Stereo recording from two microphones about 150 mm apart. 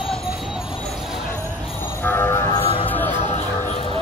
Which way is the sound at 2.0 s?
15° left (ahead or behind).